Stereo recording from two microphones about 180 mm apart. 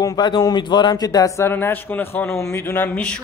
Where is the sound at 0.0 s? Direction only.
25° left (ahead or behind); by 3.2 s 5° left (ahead or behind).